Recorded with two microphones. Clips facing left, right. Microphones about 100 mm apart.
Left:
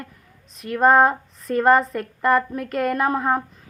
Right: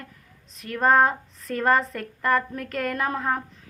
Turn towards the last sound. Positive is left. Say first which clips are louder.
# left 5 dB
turn(degrees=15)  # may be behind; listen again after turning